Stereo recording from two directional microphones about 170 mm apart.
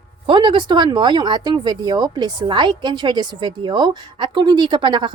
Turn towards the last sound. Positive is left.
turn(degrees=-25)  # may be behind; listen again after turning